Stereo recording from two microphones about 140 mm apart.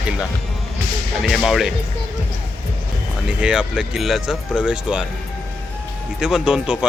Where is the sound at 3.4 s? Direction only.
5° right (ahead or behind).